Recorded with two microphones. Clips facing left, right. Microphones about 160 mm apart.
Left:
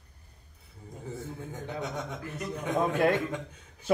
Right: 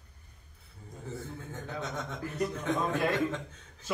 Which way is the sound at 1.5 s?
15° left (ahead or behind).